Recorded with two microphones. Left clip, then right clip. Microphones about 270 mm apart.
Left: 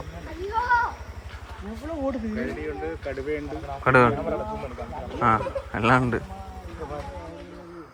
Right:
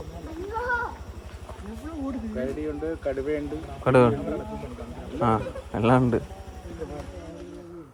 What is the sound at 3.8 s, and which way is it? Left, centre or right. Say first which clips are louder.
Speech: left 1 dB; centre.